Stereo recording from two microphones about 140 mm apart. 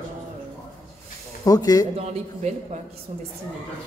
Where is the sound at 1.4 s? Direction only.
25° left (ahead or behind).